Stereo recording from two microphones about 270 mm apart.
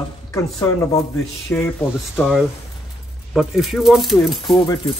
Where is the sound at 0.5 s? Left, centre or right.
Centre.